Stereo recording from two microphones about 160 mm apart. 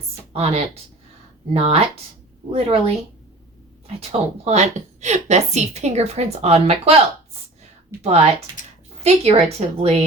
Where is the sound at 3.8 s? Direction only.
40° right (ahead or behind).